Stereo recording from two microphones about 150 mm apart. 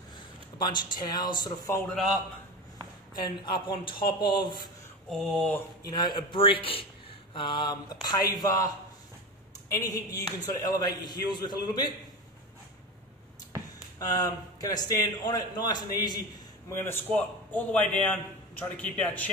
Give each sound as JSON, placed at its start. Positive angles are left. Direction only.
{"t": 0.6, "sound": "a man's voice", "side_deg": 30}
{"t": 3.2, "sound": "a man's voice", "side_deg": 30}
{"t": 5.1, "sound": "a sound", "side_deg": 0}
{"t": 5.9, "sound": "a man's voice", "side_deg": 30}
{"t": 9.7, "sound": "a man's voice", "side_deg": 25}
{"t": 13.9, "sound": "a man's voice", "side_deg": 25}
{"t": 16.8, "sound": "a man's voice", "side_deg": 15}